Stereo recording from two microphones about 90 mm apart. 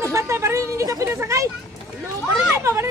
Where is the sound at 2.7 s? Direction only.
35° right (ahead or behind).